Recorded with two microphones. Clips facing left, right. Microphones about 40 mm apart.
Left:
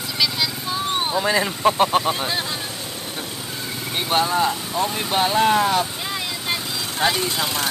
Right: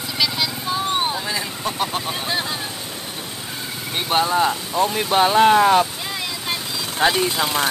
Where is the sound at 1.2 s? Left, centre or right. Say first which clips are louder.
Left 7 dB; left.